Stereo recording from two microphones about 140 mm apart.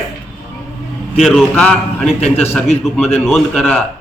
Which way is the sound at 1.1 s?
Centre (ahead or behind).